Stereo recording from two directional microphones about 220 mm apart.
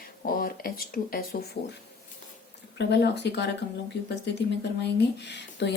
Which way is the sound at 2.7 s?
50° left (ahead or behind).